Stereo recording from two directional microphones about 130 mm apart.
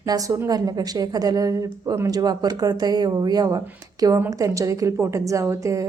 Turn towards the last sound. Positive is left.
turn(degrees=-25)  # may be behind; listen again after turning